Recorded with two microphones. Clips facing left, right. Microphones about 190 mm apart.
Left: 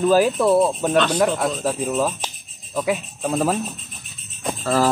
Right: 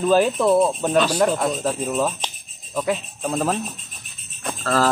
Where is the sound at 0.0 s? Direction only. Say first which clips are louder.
Left 1 dB; 5° left (ahead or behind).